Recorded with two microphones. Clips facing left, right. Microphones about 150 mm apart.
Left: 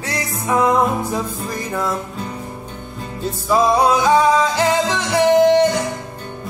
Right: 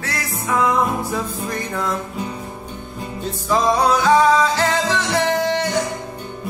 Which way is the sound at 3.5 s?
15° left (ahead or behind).